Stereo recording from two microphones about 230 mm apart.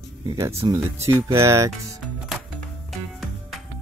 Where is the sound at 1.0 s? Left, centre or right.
Centre.